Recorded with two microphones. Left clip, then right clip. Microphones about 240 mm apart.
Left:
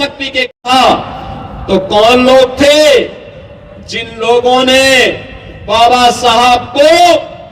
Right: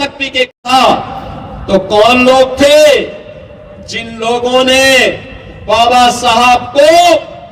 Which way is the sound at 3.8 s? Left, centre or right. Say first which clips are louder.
Left 3 dB; right.